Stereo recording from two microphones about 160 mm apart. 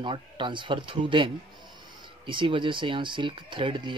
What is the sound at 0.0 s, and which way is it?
Speech, 30° right (ahead or behind).